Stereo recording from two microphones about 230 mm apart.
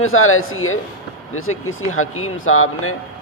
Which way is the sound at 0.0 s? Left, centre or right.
Left.